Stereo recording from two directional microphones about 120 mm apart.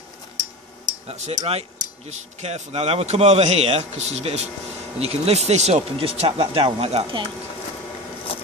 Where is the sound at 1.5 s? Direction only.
65° right (ahead or behind).